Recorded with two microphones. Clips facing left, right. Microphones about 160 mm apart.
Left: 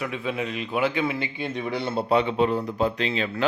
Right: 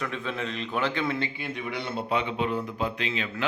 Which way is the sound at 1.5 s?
35° left (ahead or behind).